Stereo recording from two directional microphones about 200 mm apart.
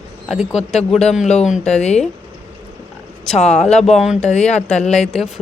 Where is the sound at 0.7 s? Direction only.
35° left (ahead or behind).